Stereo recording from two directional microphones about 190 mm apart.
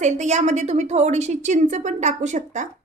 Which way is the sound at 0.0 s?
40° right (ahead or behind).